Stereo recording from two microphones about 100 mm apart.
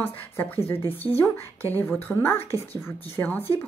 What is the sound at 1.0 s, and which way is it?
Speech, 20° left (ahead or behind).